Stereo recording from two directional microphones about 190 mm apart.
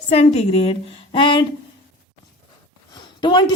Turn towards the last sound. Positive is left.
turn(degrees=25)  # may be behind; listen again after turning